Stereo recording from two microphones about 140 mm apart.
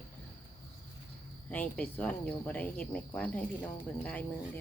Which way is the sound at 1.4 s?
10° left (ahead or behind).